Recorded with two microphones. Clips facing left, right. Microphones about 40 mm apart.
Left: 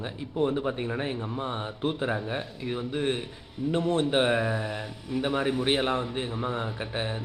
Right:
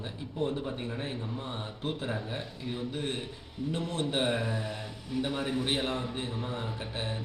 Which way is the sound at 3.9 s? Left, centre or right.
Left.